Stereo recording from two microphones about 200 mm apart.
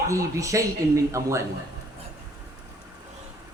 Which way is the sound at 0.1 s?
15° right (ahead or behind).